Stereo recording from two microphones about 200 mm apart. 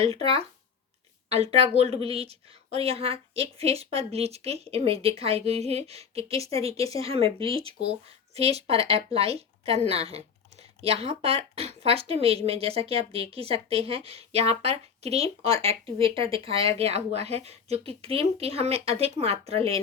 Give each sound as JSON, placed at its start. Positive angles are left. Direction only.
{"t": 0.0, "sound": "a woman's voice", "side_deg": -30}